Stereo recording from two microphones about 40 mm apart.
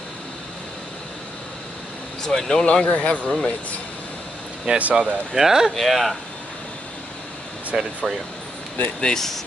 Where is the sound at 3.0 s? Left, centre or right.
Left.